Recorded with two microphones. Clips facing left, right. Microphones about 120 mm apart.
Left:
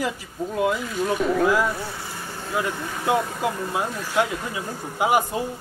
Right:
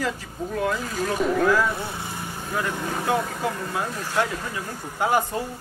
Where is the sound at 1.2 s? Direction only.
Centre (ahead or behind).